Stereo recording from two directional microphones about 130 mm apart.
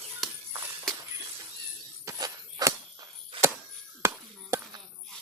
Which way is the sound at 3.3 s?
45° right (ahead or behind).